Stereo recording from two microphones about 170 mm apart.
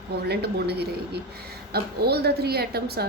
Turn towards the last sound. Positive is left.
turn(degrees=-70)  # may be behind; listen again after turning